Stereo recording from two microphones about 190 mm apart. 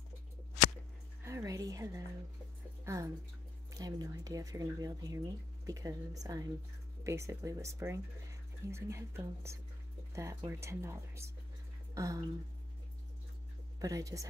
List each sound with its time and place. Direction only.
1.2 s music: 15° right (ahead or behind)
2.8 s speech: 15° right (ahead or behind)
11.9 s a sound: 15° right (ahead or behind)
13.7 s speech: 20° right (ahead or behind)